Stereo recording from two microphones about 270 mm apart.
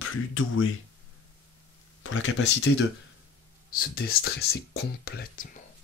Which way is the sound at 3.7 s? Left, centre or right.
Left.